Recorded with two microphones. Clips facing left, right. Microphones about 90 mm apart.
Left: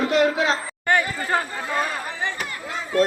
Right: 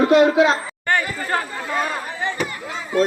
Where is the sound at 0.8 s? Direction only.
5° left (ahead or behind).